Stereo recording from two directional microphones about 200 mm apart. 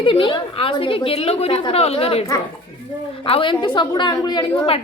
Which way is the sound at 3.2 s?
25° left (ahead or behind).